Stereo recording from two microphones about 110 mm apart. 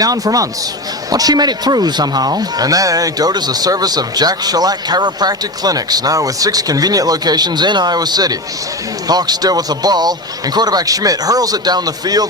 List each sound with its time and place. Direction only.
0.0 s speech: 35° right (ahead or behind)